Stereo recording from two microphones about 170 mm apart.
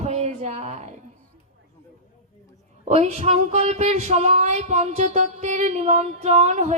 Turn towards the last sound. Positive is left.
turn(degrees=-45)  # may be behind; listen again after turning